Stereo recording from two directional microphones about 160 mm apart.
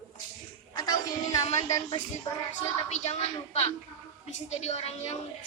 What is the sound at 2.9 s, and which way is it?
A woman's voice, 40° left (ahead or behind).